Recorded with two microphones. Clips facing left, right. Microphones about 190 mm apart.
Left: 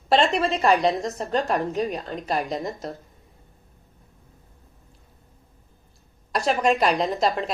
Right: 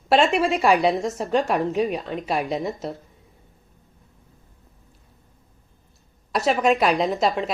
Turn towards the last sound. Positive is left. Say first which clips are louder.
# right 1 dB
turn(degrees=0)  # may be behind; listen again after turning